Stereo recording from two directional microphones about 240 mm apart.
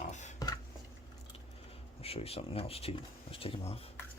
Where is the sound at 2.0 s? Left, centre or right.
Left.